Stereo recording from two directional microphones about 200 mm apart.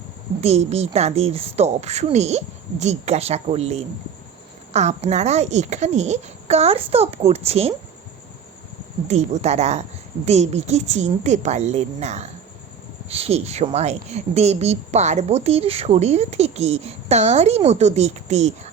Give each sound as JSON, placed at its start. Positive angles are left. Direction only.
{"t": 0.4, "sound": "speech", "side_deg": -30}
{"t": 9.0, "sound": "speech", "side_deg": -35}